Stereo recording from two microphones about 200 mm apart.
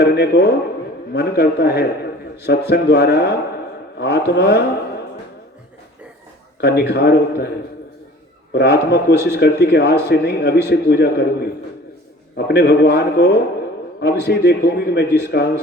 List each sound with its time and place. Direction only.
0.0 s speech: 55° left (ahead or behind)
6.6 s speech: 55° left (ahead or behind)
8.5 s speech: 55° left (ahead or behind)
12.5 s speech: 55° left (ahead or behind)